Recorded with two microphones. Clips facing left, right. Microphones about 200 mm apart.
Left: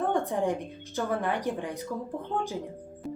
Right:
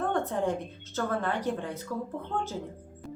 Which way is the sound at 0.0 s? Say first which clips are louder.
Left 1 dB; 15° left (ahead or behind).